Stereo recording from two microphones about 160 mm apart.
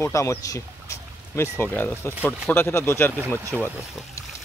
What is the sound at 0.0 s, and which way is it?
Speech, 20° left (ahead or behind).